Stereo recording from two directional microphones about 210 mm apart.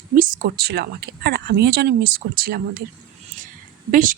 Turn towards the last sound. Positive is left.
turn(degrees=-40)  # may be behind; listen again after turning